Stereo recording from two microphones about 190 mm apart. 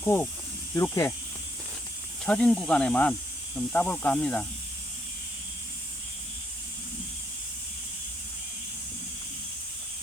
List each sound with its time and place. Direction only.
0.0 s speech: 10° left (ahead or behind)
2.2 s speech: 5° left (ahead or behind)